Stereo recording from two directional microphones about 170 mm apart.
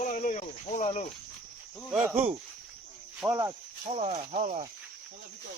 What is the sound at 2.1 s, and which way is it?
Speech, 35° right (ahead or behind).